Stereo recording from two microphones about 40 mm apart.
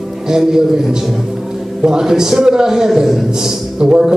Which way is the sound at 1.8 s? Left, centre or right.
Centre.